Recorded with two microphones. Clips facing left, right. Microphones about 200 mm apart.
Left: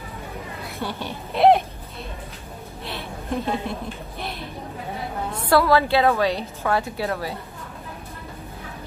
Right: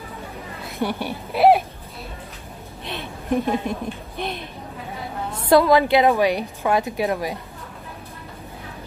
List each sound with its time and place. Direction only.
0.7 s a woman's voice: 10° right (ahead or behind)
2.8 s a sound: 15° right (ahead or behind)
5.5 s a woman's voice: 20° right (ahead or behind)